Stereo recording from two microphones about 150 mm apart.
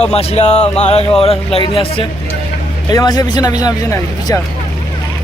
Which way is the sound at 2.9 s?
25° left (ahead or behind).